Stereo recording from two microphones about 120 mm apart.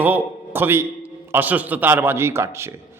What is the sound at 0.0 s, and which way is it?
A man's voice, 15° right (ahead or behind).